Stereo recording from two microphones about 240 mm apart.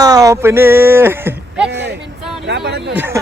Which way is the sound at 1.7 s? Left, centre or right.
Right.